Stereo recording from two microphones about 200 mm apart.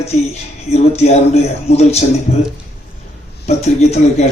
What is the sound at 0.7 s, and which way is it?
A man's voice, 30° left (ahead or behind).